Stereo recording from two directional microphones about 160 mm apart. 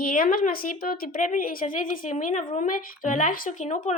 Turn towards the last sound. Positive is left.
turn(degrees=50)  # may be behind; listen again after turning